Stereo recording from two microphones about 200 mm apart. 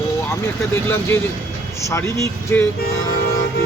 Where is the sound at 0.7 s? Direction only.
10° left (ahead or behind).